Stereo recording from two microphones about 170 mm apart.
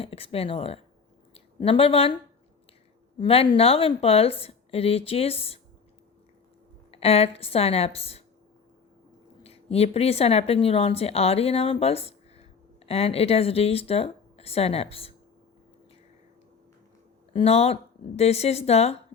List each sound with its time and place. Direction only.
0.0 s speech: 35° left (ahead or behind)
3.2 s a woman's voice: 30° left (ahead or behind)
6.9 s a woman's voice: 35° left (ahead or behind)
9.4 s speech: 35° left (ahead or behind)
17.3 s a woman's voice: 35° left (ahead or behind)